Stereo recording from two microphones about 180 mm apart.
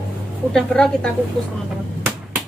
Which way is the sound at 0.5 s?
5° left (ahead or behind).